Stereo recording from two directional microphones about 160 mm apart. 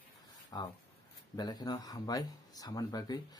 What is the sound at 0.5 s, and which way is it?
Speech, 25° left (ahead or behind).